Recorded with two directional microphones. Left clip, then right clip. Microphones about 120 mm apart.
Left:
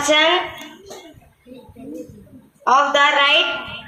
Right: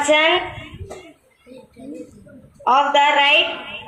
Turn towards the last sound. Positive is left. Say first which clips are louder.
# even
turn(degrees=-40)  # may be behind; listen again after turning